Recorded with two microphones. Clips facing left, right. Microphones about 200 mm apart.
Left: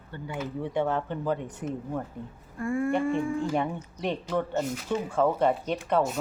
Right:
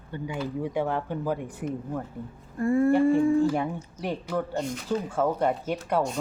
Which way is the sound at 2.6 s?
35° right (ahead or behind).